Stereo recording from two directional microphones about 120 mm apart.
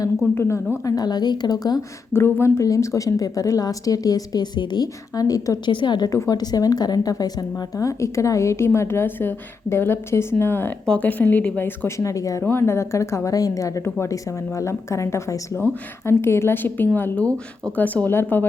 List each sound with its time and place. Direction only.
0.3 s a woman's voice: 20° left (ahead or behind)
0.9 s a woman's voice: 35° left (ahead or behind)
2.1 s a woman's voice: 20° left (ahead or behind)